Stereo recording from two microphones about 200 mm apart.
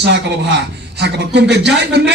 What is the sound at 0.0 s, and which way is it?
A man's voice, 60° right (ahead or behind).